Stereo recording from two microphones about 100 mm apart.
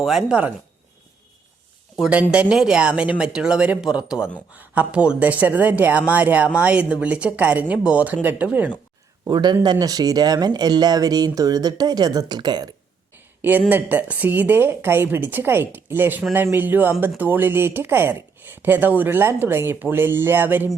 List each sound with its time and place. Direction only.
0.0 s a woman's voice: 5° right (ahead or behind)
2.0 s a woman's voice: 15° right (ahead or behind)
9.2 s speech: 45° right (ahead or behind)
13.1 s a sound: 20° right (ahead or behind)
13.9 s speech: 15° right (ahead or behind)